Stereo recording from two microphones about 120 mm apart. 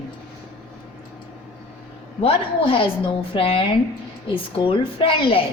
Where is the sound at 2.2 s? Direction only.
50° left (ahead or behind).